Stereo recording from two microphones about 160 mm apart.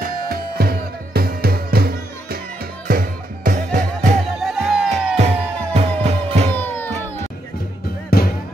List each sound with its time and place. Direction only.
0.0 s music: 70° right (ahead or behind)
4.4 s music: centre (ahead or behind)
4.9 s music: 45° right (ahead or behind)
6.5 s music: 10° left (ahead or behind)
8.1 s music: 70° left (ahead or behind)